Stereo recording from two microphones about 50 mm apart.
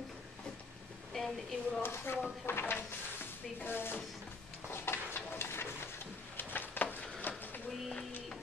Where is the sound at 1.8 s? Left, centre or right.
Left.